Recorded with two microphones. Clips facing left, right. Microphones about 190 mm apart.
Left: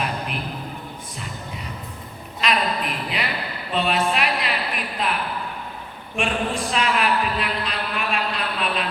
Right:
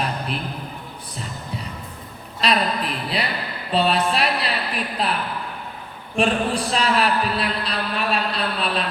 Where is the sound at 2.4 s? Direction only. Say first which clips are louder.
Right 2 dB; 35° right (ahead or behind).